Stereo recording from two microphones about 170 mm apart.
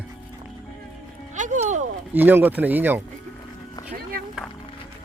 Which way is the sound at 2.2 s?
10° right (ahead or behind).